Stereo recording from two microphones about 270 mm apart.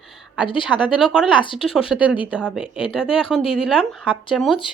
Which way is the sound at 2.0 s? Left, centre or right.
Centre.